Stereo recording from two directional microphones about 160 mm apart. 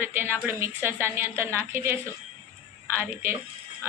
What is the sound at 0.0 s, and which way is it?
A woman's voice, 15° right (ahead or behind).